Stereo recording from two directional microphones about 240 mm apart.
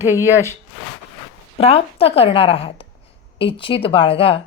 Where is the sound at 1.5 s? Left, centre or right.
Left.